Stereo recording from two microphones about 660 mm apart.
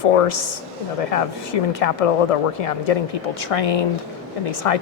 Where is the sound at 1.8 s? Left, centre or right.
Left.